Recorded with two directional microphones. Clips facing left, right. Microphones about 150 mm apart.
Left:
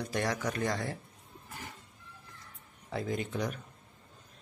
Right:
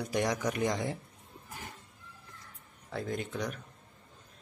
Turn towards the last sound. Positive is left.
turn(degrees=0)  # may be behind; listen again after turning